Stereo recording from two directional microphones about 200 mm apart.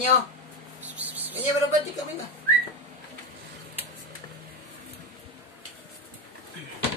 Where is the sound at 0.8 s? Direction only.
10° right (ahead or behind).